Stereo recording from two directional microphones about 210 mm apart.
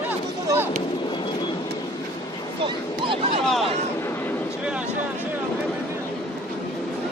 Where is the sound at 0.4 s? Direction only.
10° right (ahead or behind).